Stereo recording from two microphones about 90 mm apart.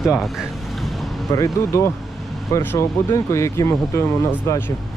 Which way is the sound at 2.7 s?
35° left (ahead or behind).